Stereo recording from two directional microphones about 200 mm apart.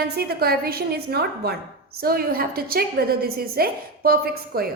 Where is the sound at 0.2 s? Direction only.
50° right (ahead or behind).